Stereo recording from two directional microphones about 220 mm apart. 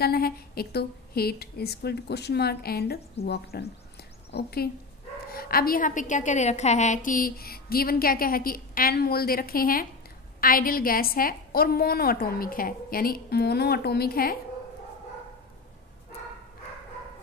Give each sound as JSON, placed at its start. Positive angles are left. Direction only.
{"t": 0.0, "sound": "a woman's voice", "side_deg": 45}